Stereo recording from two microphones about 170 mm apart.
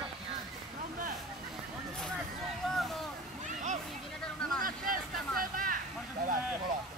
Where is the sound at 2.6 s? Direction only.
Centre (ahead or behind).